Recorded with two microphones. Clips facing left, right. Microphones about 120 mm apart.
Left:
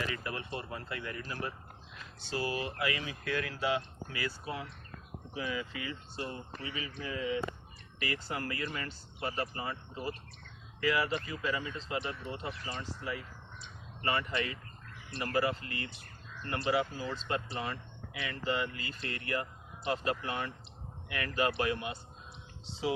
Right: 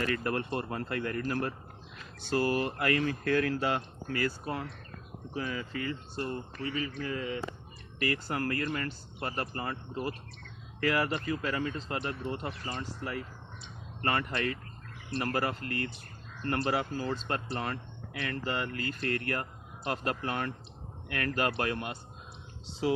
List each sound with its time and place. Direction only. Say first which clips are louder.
0.0 s speech: right 7 dB; 55° right (ahead or behind)